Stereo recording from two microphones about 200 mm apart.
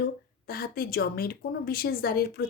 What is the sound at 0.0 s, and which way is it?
A woman's voice, 50° left (ahead or behind).